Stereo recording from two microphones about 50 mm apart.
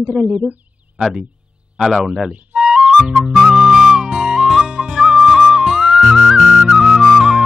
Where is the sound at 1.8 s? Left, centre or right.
Centre.